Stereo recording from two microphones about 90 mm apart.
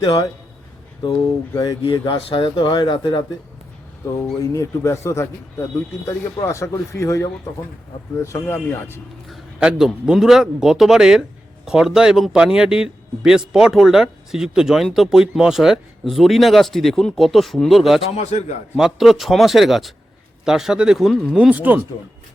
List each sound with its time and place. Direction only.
0.0 s a man's voice: 45° left (ahead or behind)
1.5 s speech: 40° left (ahead or behind)
2.1 s speech: 60° left (ahead or behind)
4.4 s speech: 35° left (ahead or behind)
9.6 s a man's voice: 10° right (ahead or behind)
21.3 s speech: 15° right (ahead or behind)